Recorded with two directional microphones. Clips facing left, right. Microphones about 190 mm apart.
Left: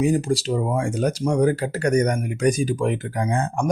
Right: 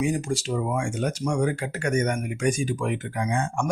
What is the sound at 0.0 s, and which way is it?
Speech, 35° left (ahead or behind).